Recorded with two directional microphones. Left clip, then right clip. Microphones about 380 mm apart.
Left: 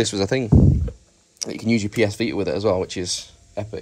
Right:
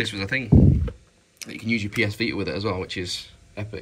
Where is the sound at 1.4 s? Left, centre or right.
Centre.